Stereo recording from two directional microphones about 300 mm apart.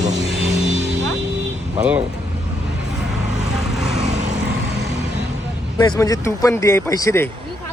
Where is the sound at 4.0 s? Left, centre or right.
Right.